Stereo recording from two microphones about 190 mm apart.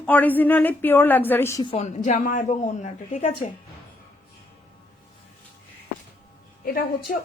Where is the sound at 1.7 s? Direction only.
40° left (ahead or behind).